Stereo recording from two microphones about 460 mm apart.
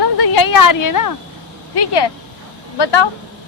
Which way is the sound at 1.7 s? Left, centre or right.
Left.